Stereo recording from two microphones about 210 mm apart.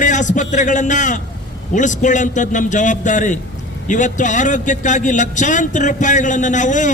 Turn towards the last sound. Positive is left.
turn(degrees=35)  # may be behind; listen again after turning